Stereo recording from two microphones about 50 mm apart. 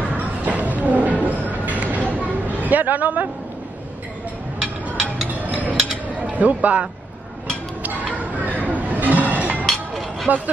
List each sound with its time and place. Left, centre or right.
0.1 s a sound: right
2.6 s speech: right
5.4 s mechanisms: right
6.1 s speech: right
8.2 s a sound: right
10.3 s speech: right